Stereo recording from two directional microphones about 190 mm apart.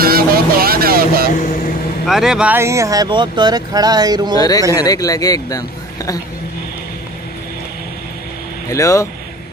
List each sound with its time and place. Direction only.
0.0 s vehicle: 50° right (ahead or behind)
2.0 s speech: centre (ahead or behind); by 4.4 s 20° right (ahead or behind)
4.4 s speech: 20° left (ahead or behind)
8.6 s speech: 15° left (ahead or behind)